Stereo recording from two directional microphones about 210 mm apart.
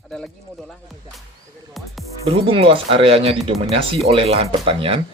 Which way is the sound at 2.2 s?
25° right (ahead or behind).